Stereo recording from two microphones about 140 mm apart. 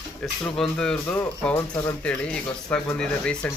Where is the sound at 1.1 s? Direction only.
15° left (ahead or behind).